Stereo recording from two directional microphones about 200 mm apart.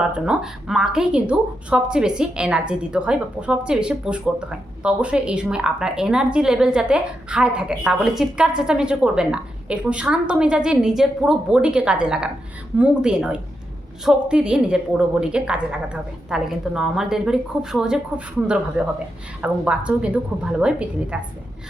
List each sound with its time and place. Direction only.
0.1 s a woman's voice: 5° right (ahead or behind)